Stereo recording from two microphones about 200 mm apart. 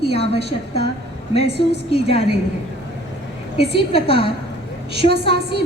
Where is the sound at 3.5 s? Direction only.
55° right (ahead or behind).